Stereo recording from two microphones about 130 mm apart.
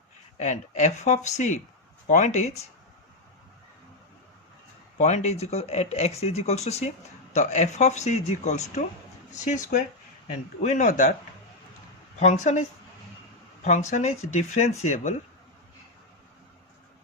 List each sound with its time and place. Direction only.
0.3 s speech: 65° left (ahead or behind)
4.9 s speech: 60° left (ahead or behind)
12.2 s speech: 65° left (ahead or behind)
13.9 s speech: 60° left (ahead or behind)